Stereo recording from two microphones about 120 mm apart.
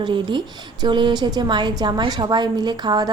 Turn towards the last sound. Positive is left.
turn(degrees=-35)  # may be behind; listen again after turning